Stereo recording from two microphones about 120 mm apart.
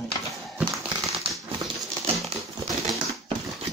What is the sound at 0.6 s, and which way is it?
Typewriter, 5° right (ahead or behind).